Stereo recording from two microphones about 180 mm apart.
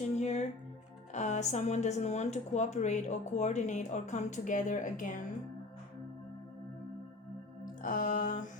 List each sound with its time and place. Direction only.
0.2 s music: 40° left (ahead or behind)
1.1 s speech: 40° left (ahead or behind)
7.6 s music: 45° left (ahead or behind)